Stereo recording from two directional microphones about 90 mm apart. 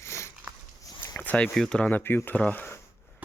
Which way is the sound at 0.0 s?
30° left (ahead or behind).